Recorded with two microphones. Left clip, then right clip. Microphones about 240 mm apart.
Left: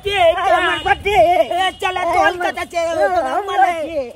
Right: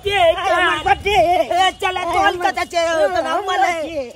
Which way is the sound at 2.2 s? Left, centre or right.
Centre.